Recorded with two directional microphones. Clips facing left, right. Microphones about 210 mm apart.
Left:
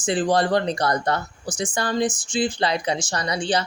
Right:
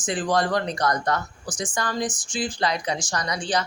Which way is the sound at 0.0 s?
30° left (ahead or behind).